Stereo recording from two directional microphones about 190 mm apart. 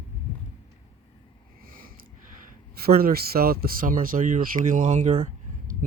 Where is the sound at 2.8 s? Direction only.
50° right (ahead or behind).